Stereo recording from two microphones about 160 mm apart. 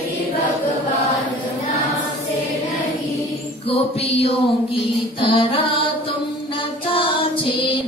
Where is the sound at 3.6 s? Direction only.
40° left (ahead or behind).